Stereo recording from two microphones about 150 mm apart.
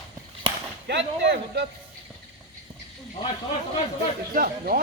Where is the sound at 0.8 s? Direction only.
90° right.